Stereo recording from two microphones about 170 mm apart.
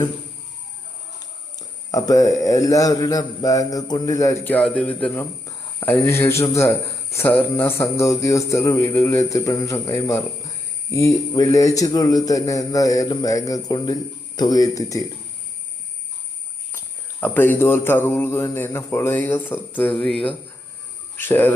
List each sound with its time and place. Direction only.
1.9 s a man's voice: 20° left (ahead or behind)
4.5 s mantra: 10° left (ahead or behind)
5.5 s speech: 15° left (ahead or behind)
7.5 s mantra: 15° left (ahead or behind)
10.9 s a man's voice: 20° left (ahead or behind)
16.7 s mantra: 10° left (ahead or behind)